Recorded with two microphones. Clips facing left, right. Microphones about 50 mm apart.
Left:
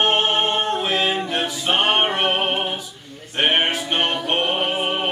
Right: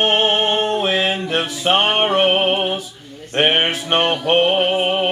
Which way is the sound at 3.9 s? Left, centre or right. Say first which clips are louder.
Right 7 dB; right.